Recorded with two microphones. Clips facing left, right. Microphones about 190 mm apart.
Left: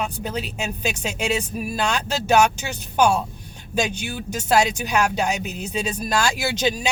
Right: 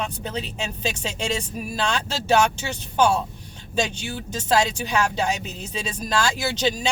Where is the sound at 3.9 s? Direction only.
25° right (ahead or behind).